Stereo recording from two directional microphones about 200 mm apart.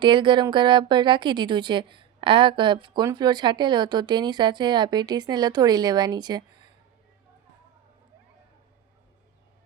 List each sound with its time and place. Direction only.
0.0 s speech: 25° right (ahead or behind)